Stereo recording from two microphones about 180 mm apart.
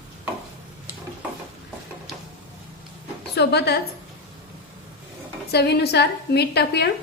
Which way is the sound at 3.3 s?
65° left (ahead or behind).